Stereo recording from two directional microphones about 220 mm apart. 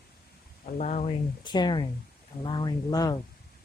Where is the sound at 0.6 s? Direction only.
30° left (ahead or behind); by 3.2 s 15° left (ahead or behind).